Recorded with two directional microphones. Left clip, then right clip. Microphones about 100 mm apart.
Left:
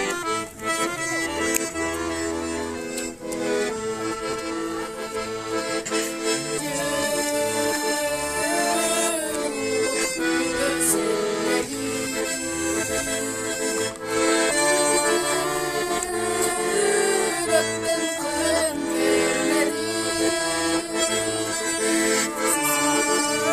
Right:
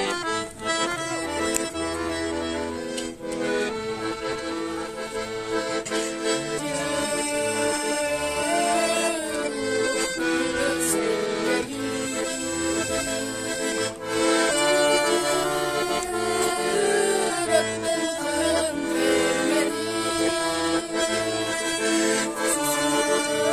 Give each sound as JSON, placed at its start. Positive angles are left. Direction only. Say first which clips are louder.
{"t": 15.0, "sound": "music", "louder": "even", "side_deg": 0}
{"t": 21.8, "sound": "accordion", "louder": "left 1 dB", "side_deg": 0}